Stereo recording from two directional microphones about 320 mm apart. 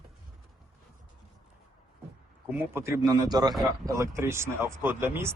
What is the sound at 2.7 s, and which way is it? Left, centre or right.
Speech, centre.